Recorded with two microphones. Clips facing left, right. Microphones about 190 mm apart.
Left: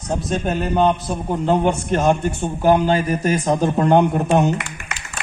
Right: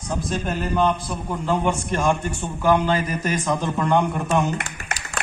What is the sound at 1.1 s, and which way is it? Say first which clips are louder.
A man's voice: left 5 dB; 35° left (ahead or behind).